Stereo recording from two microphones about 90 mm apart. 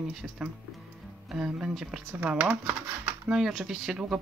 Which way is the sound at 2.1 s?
20° right (ahead or behind).